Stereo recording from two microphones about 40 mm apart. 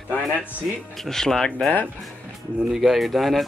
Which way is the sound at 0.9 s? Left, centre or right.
Centre.